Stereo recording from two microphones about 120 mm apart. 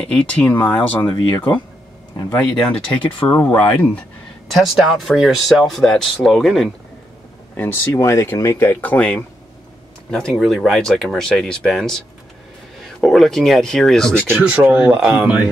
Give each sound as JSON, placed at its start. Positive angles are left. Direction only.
{"t": 0.0, "sound": "speech", "side_deg": 10}
{"t": 2.3, "sound": "speech", "side_deg": 10}
{"t": 4.5, "sound": "speech", "side_deg": 0}
{"t": 7.5, "sound": "speech", "side_deg": 15}
{"t": 13.0, "sound": "speech", "side_deg": 5}
{"t": 14.2, "sound": "speech", "side_deg": -15}